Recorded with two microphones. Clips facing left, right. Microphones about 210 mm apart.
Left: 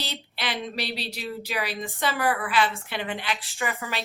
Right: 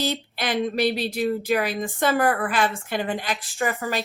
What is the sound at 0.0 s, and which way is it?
Speech, 45° right (ahead or behind).